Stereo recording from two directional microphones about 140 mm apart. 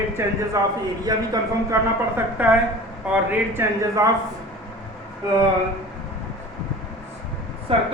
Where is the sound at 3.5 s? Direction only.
20° right (ahead or behind).